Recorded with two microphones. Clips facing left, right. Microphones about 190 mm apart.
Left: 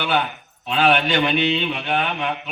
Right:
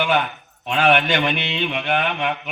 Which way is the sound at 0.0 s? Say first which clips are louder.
Right 2 dB; 35° left (ahead or behind).